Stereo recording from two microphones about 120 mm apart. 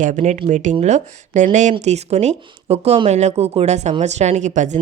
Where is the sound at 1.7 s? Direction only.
65° right (ahead or behind); by 4.8 s 90° right.